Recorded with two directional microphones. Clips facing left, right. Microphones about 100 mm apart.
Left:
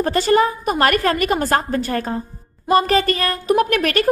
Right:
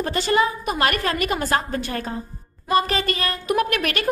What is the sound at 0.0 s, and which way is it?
A woman's voice, 40° left (ahead or behind).